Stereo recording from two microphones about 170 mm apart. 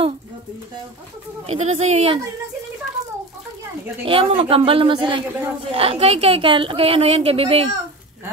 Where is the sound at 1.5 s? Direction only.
40° right (ahead or behind).